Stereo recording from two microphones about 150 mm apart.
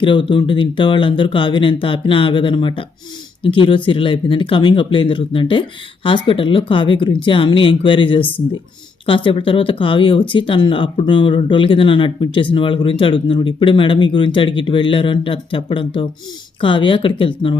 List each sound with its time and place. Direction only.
0.0 s speech: 35° left (ahead or behind)